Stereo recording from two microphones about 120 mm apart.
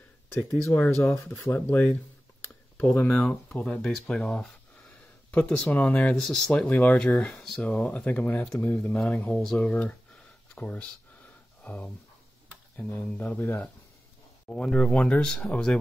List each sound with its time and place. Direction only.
0.7 s speech: 15° left (ahead or behind)
13.2 s speech: 15° left (ahead or behind)